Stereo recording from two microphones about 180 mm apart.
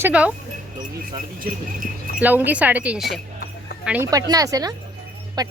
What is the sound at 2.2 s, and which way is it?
Speech, 10° right (ahead or behind).